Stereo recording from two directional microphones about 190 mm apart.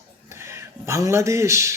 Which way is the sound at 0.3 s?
15° right (ahead or behind).